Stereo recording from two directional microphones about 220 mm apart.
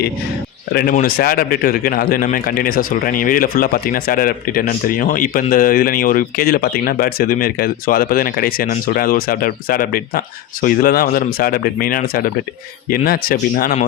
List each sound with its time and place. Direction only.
0.7 s a man's voice: 45° left (ahead or behind)